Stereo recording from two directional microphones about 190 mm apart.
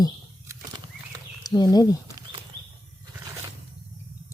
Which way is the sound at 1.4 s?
20° left (ahead or behind).